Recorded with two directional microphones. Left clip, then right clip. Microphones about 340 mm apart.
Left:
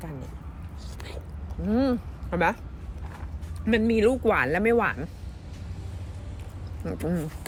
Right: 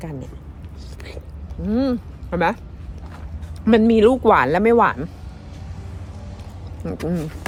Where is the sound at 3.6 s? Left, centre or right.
Centre.